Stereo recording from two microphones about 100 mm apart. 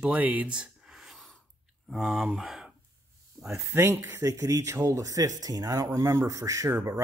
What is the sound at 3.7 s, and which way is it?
Speech, 30° right (ahead or behind).